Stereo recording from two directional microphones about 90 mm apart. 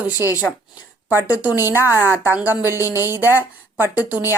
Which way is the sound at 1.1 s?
20° right (ahead or behind).